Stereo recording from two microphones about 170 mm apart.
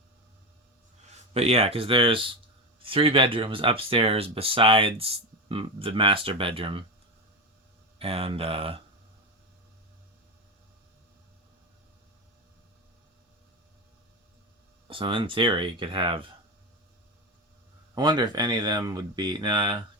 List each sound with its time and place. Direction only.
1.3 s speech: 40° right (ahead or behind)
7.9 s speech: 35° right (ahead or behind)
14.8 s speech: 30° right (ahead or behind)
17.9 s speech: 25° right (ahead or behind)